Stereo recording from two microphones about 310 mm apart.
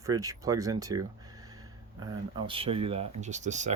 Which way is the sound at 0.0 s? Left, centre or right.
Centre.